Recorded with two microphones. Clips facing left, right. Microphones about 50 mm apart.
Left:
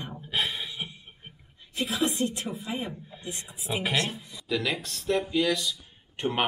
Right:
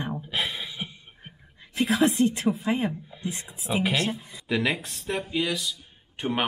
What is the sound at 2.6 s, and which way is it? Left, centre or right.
Speech, right.